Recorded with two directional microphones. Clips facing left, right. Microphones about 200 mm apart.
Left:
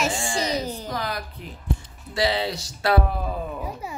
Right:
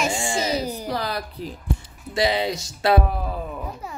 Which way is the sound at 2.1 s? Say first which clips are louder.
Right 2 dB; 15° right (ahead or behind).